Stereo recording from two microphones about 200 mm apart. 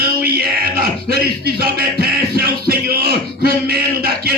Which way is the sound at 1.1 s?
50° right (ahead or behind).